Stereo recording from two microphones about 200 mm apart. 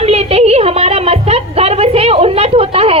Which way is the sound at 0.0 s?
30° right (ahead or behind).